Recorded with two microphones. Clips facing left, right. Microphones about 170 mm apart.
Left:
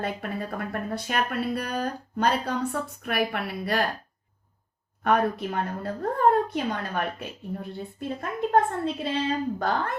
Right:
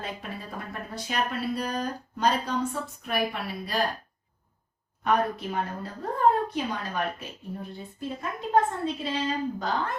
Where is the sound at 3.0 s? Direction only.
60° left (ahead or behind).